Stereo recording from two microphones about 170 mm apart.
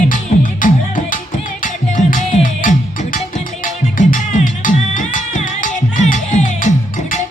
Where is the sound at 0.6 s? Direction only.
50° left (ahead or behind).